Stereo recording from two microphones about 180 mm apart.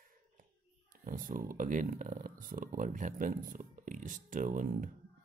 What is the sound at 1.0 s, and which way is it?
Speech, 50° right (ahead or behind).